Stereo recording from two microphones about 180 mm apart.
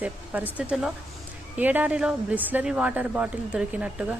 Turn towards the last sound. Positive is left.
turn(degrees=-5)  # may be behind; listen again after turning